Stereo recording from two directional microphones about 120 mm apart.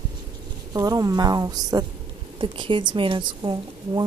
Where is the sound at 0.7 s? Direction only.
30° right (ahead or behind).